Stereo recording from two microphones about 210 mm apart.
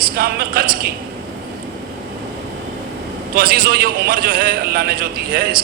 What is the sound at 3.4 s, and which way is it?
A man's voice, 45° right (ahead or behind).